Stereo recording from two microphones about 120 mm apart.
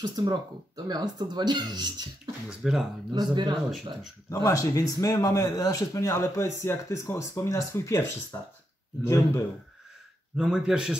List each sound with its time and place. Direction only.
0.0 s speech: 35° right (ahead or behind)
2.6 s speech: 5° right (ahead or behind)
3.1 s speech: 40° right (ahead or behind)
4.3 s speech: 30° left (ahead or behind)
10.3 s a man's voice: 5° right (ahead or behind)